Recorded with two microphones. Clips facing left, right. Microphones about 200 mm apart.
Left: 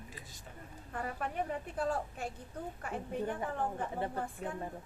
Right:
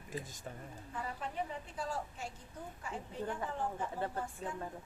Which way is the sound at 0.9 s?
55° left (ahead or behind).